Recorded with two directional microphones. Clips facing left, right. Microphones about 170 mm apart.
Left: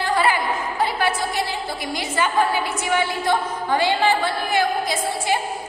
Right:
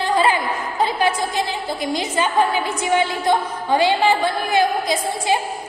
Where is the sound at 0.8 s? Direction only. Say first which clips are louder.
Right 4 dB; 20° right (ahead or behind).